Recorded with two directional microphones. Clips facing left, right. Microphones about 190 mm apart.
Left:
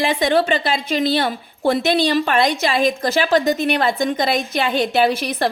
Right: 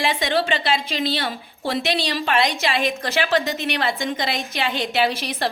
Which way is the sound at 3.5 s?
50° left (ahead or behind).